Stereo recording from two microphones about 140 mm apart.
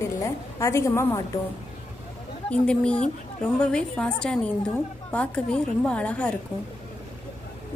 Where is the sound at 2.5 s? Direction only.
10° left (ahead or behind).